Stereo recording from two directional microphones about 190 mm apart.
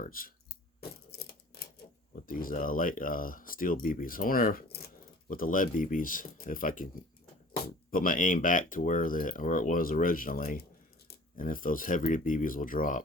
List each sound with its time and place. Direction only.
0.0 s speech: 50° left (ahead or behind)
0.8 s typewriter: 55° left (ahead or behind)
2.2 s speech: 50° left (ahead or behind)
7.9 s speech: 45° left (ahead or behind)